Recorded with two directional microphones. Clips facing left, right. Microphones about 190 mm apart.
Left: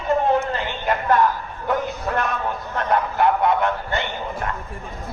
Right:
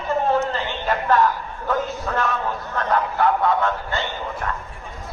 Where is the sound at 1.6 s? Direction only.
15° left (ahead or behind).